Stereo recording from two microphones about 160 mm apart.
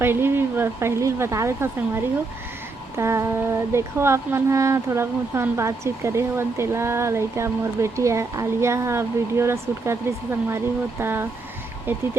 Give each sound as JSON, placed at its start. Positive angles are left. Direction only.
{"t": 0.0, "sound": "speech", "side_deg": -15}
{"t": 3.0, "sound": "speech", "side_deg": -15}